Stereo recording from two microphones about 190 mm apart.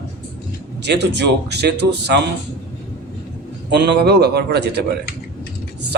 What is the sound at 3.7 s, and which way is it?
A man's voice, 65° right (ahead or behind).